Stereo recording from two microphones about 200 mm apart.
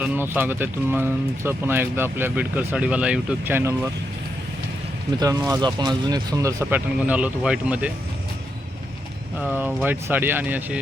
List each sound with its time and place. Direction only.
0.0 s speech: 10° right (ahead or behind)
5.2 s speech: 20° right (ahead or behind)
9.4 s speech: 10° right (ahead or behind)